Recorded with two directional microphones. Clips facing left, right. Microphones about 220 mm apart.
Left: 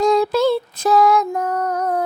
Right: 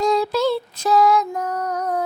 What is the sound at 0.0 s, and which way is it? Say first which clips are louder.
Music: left 3 dB; 50° left (ahead or behind).